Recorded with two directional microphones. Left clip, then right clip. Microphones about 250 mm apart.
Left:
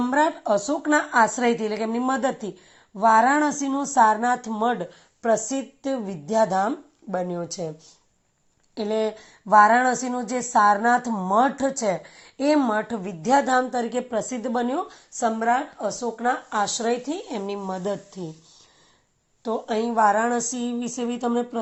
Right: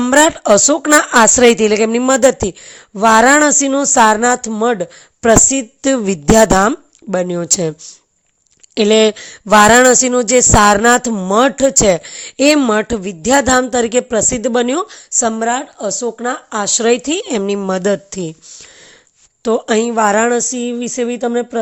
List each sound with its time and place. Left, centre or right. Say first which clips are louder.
0.0 s a woman's voice: right 11 dB; right
13.2 s a woman's voice: right 8 dB; right
19.4 s a woman's voice: right 11 dB; right
20.3 s speech: right 10 dB; right